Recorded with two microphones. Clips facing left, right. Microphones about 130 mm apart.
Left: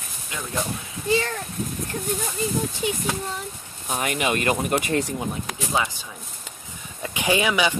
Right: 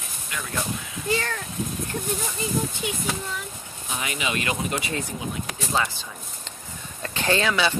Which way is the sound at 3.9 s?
50° left (ahead or behind).